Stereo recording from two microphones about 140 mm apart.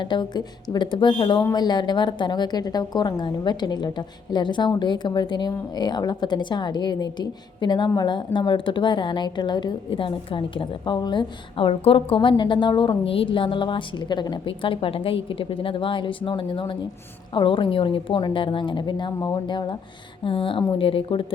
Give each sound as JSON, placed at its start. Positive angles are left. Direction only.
{"t": 0.0, "sound": "a woman's voice", "side_deg": 35}